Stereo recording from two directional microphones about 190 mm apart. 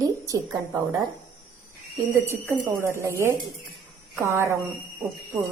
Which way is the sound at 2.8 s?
15° right (ahead or behind).